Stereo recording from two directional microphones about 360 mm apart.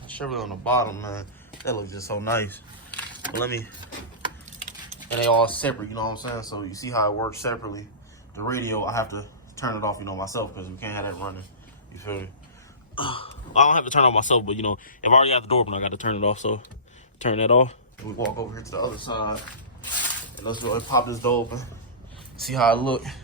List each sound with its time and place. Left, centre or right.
0.1 s a man's voice: centre
5.5 s a man's voice: centre
18.3 s speech: centre
20.4 s a man's voice: centre